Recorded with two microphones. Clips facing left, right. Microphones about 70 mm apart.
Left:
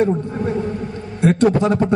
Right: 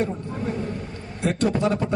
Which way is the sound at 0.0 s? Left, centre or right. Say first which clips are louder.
Left 8 dB; left.